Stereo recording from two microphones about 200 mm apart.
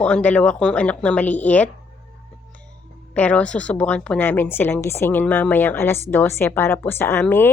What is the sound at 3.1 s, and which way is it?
Speech, 5° left (ahead or behind).